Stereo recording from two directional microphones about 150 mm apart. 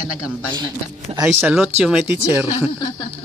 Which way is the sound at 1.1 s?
40° right (ahead or behind).